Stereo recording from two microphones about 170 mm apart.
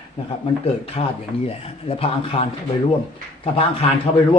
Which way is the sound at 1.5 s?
35° left (ahead or behind).